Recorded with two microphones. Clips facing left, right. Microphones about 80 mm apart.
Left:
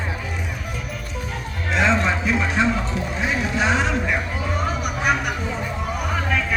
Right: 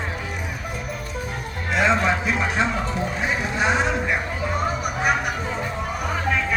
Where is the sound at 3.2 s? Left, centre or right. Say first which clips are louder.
Left 1 dB; right.